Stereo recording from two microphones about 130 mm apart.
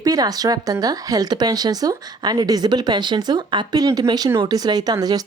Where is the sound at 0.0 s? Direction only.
30° right (ahead or behind).